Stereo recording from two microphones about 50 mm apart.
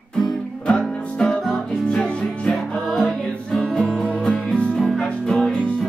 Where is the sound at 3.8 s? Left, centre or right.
Centre.